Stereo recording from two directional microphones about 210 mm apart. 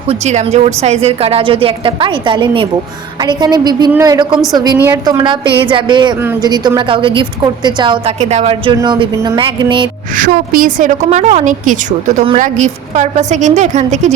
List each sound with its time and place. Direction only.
0.1 s a woman's voice: 35° right (ahead or behind)
10.2 s a woman's voice: 40° right (ahead or behind)